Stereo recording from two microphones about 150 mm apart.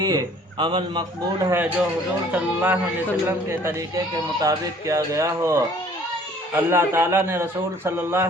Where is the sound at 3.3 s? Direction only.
20° right (ahead or behind).